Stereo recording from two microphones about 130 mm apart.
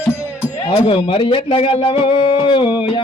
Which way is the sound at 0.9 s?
45° left (ahead or behind).